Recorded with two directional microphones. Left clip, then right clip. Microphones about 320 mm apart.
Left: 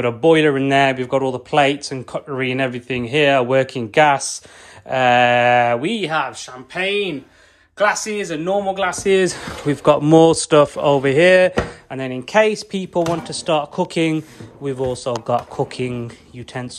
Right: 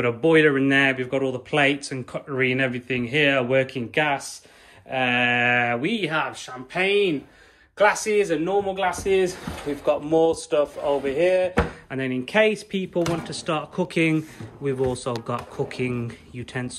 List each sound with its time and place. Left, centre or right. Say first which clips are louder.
0.0 s speech: left 4 dB; centre; by 11.5 s left
11.9 s speech: left 8 dB; centre